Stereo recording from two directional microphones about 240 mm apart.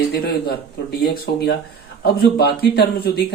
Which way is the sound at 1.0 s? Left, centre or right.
Left.